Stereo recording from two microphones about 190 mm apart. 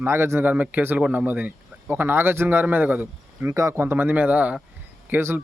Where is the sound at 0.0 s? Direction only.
15° right (ahead or behind).